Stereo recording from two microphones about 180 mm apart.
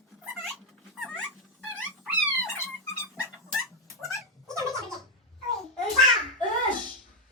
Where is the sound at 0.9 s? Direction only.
Centre (ahead or behind).